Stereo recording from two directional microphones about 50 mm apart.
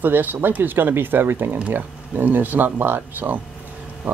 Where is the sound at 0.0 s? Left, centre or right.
Right.